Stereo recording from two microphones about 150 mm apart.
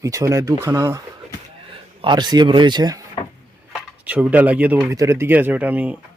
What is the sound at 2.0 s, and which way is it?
Speech, 30° right (ahead or behind).